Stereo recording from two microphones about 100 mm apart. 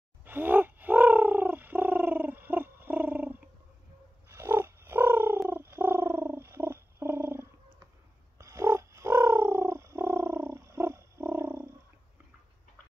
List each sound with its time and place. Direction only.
0.2 s bird: 20° right (ahead or behind)
4.4 s frog: 20° right (ahead or behind)
5.5 s a sound: 25° right (ahead or behind)